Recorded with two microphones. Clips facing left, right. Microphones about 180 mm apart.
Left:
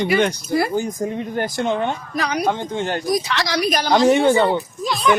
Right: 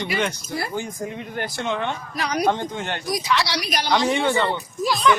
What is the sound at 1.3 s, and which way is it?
Speech, 40° left (ahead or behind).